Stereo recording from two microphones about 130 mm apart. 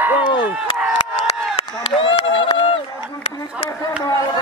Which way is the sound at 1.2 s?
50° left (ahead or behind).